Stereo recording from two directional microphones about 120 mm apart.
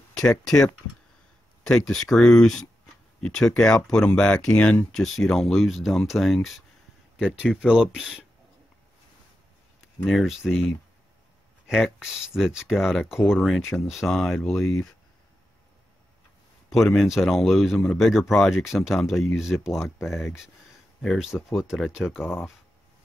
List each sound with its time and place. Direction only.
0.1 s a sound: 5° left (ahead or behind)
1.6 s speech: 5° left (ahead or behind)
10.0 s speech: centre (ahead or behind)
16.7 s speech: centre (ahead or behind)
22.2 s speech: 20° left (ahead or behind)